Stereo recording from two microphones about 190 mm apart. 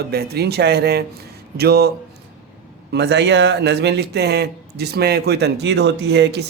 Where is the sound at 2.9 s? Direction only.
65° right (ahead or behind).